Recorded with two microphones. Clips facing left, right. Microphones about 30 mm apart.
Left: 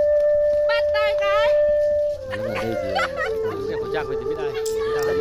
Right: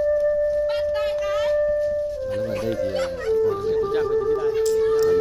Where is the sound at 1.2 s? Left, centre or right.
Left.